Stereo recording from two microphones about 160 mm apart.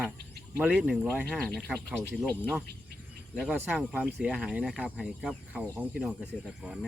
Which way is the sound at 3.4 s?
10° right (ahead or behind).